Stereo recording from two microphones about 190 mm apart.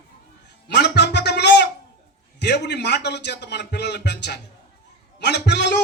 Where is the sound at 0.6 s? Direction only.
60° left (ahead or behind).